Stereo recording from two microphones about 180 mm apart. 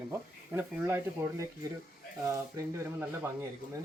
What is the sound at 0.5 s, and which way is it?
Speech, 10° right (ahead or behind).